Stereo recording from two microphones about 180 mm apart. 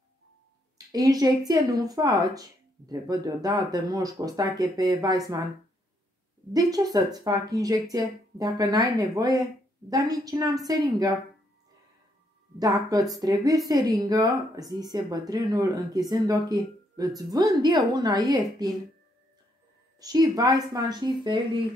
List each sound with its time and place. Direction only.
0.9 s speech: 20° right (ahead or behind)
6.5 s speech: 20° right (ahead or behind)
12.5 s speech: 20° right (ahead or behind)
20.0 s speech: 20° right (ahead or behind)